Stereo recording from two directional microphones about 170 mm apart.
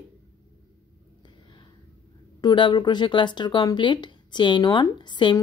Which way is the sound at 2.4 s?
25° left (ahead or behind).